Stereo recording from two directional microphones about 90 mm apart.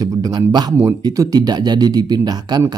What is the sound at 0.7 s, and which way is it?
Speech, 40° right (ahead or behind).